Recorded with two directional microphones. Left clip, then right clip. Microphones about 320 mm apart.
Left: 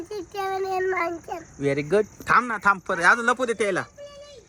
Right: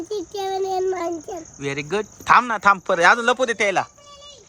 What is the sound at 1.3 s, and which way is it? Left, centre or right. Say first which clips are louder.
Speech: left 2 dB; centre.